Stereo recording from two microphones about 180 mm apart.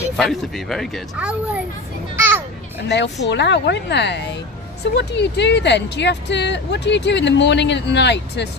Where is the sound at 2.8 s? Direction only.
75° left (ahead or behind).